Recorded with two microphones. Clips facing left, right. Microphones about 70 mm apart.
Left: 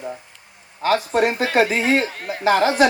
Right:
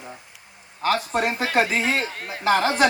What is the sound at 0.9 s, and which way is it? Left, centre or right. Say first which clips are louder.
Speech: left 4 dB; left.